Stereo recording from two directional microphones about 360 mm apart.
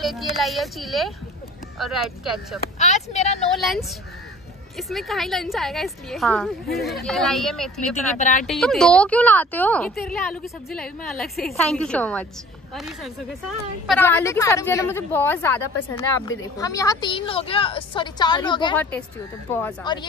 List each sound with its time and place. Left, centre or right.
0.0 s a woman's voice: centre
2.8 s a woman's voice: centre
3.5 s a woman's voice: centre
8.2 s speech: left
8.5 s a woman's voice: centre